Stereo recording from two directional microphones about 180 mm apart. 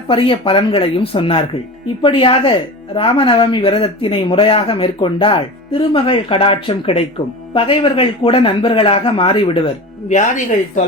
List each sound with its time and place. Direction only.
0.1 s speech: 30° left (ahead or behind)
10.1 s a woman's voice: 40° left (ahead or behind)